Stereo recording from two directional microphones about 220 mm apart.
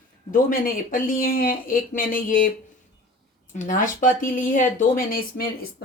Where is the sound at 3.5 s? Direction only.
35° left (ahead or behind).